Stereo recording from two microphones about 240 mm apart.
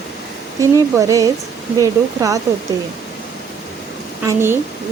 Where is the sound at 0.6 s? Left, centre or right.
Centre.